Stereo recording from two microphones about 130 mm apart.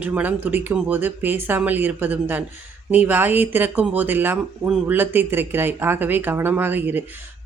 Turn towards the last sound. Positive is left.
turn(degrees=-15)  # may be behind; listen again after turning